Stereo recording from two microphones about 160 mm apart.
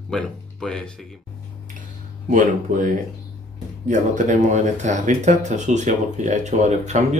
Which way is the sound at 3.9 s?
50° right (ahead or behind).